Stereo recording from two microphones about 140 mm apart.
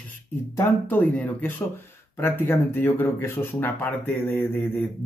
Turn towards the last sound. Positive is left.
turn(degrees=10)  # may be behind; listen again after turning